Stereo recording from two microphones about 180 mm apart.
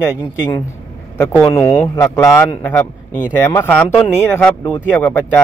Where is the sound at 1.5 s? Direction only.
20° left (ahead or behind).